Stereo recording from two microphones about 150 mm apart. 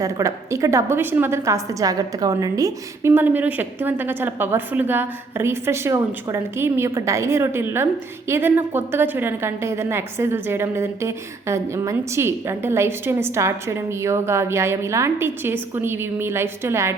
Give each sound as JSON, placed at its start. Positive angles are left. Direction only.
{"t": 0.0, "sound": "a woman's voice", "side_deg": -20}